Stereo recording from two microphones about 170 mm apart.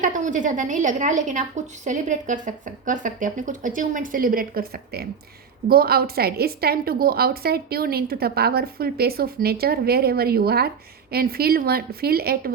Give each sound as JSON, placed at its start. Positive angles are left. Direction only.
{"t": 0.0, "sound": "a woman's voice", "side_deg": -50}